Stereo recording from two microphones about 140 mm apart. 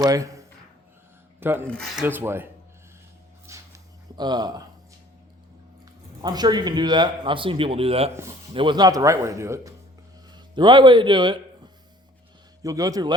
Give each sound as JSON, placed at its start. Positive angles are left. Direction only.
{"t": 0.0, "sound": "speech", "side_deg": -25}
{"t": 1.6, "sound": "filing", "side_deg": 5}
{"t": 2.0, "sound": "filing", "side_deg": -15}
{"t": 3.4, "sound": "a sound", "side_deg": -20}
{"t": 5.8, "sound": "speech", "side_deg": -30}
{"t": 8.5, "sound": "speech", "side_deg": -35}
{"t": 10.3, "sound": "speech", "side_deg": -30}